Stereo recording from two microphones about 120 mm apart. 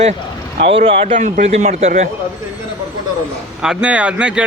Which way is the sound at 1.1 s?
80° right.